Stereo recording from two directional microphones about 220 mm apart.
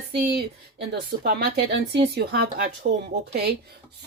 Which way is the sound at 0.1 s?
45° right (ahead or behind).